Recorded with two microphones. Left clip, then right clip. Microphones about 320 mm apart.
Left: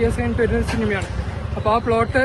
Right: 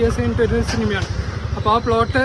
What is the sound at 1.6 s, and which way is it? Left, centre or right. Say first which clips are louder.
Speech: right 1 dB; centre.